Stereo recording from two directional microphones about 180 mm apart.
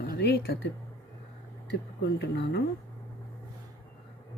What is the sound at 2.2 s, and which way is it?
Speech, 70° left (ahead or behind).